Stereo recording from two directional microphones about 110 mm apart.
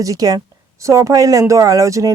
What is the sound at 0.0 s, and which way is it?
Speech, 30° right (ahead or behind).